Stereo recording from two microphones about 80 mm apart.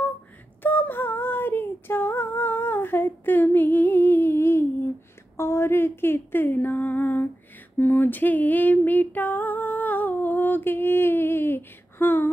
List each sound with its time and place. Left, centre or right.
0.6 s female singing: left
5.4 s a sound: left
7.8 s music: left